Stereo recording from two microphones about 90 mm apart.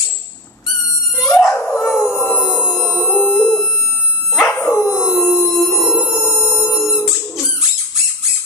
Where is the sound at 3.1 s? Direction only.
20° left (ahead or behind).